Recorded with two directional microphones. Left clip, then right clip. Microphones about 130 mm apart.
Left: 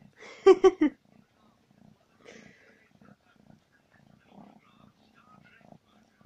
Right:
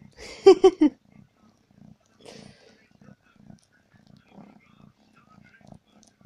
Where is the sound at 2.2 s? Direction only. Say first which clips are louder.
Right 4 dB; 35° right (ahead or behind).